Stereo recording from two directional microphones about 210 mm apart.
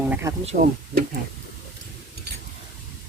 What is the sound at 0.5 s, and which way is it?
Speech, 40° right (ahead or behind).